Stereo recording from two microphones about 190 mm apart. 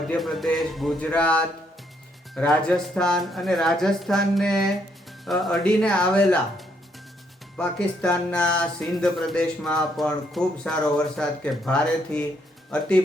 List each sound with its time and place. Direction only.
0.1 s speech: centre (ahead or behind)
7.5 s speech: 5° left (ahead or behind)